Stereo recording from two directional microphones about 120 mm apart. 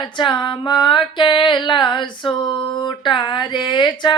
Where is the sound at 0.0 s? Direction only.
40° left (ahead or behind).